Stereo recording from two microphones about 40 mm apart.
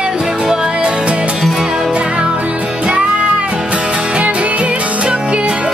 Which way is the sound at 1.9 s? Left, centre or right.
Right.